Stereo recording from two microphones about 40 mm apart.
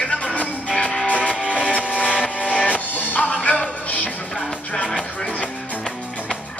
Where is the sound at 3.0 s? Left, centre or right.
Left.